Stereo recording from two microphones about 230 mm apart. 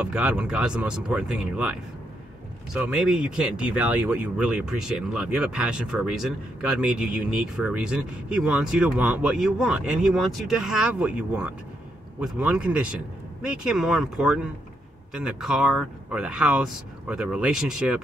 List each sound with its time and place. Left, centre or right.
0.0 s speech: centre